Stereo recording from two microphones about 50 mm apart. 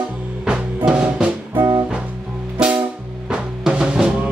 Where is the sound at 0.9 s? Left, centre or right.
Centre.